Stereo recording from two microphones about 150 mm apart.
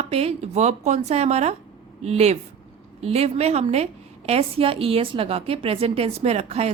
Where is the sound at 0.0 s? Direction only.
45° right (ahead or behind).